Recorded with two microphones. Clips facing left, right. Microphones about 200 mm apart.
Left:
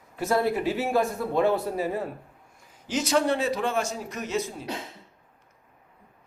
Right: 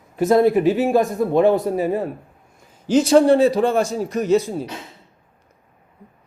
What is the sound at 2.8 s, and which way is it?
A man's voice, 30° right (ahead or behind).